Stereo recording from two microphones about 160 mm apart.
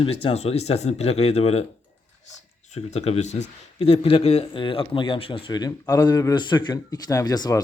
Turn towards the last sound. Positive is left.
turn(degrees=25)  # may be behind; listen again after turning